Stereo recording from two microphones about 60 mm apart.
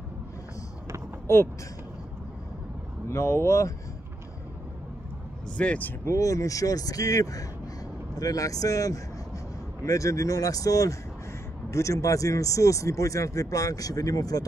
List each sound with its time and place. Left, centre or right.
1.2 s speech: left
3.1 s speech: left
5.6 s speech: left
6.0 s speech: left
11.7 s speech: left